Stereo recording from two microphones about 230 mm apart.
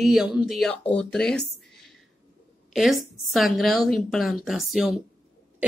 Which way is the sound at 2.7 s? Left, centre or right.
Centre.